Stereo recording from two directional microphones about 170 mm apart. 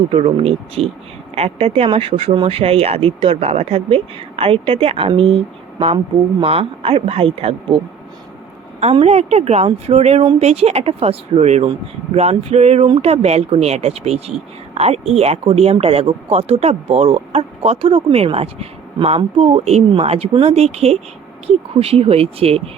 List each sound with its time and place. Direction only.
0.1 s speech: 35° right (ahead or behind)
6.4 s speech: 35° right (ahead or behind)
8.8 s speech: 40° right (ahead or behind)